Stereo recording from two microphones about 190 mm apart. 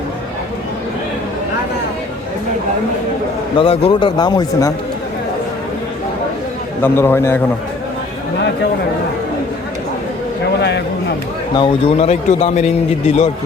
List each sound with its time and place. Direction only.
3.6 s a man's voice: 30° left (ahead or behind)
6.8 s a man's voice: 10° left (ahead or behind)
10.6 s a sound: 65° left (ahead or behind)
11.5 s a man's voice: 30° left (ahead or behind)